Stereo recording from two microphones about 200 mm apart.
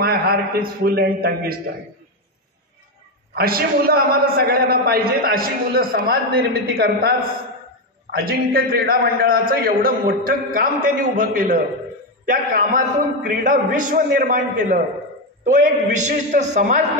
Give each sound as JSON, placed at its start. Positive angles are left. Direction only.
{"t": 0.3, "sound": "a man's voice", "side_deg": -50}
{"t": 3.3, "sound": "a man's voice", "side_deg": -50}